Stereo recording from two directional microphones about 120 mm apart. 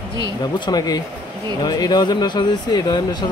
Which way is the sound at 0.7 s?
35° left (ahead or behind).